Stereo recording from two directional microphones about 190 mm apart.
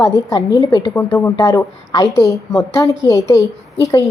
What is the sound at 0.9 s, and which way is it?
A woman's voice, 10° left (ahead or behind).